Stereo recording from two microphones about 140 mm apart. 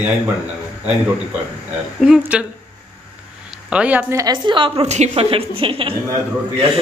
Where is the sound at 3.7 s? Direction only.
10° right (ahead or behind).